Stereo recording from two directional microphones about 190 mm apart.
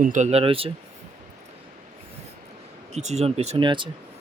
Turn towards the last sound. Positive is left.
turn(degrees=-25)  # may be behind; listen again after turning